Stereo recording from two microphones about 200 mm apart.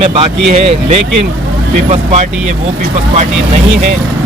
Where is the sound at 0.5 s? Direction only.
30° right (ahead or behind).